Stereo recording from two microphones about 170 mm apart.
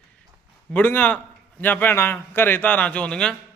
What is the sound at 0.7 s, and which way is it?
A man's voice, 10° left (ahead or behind).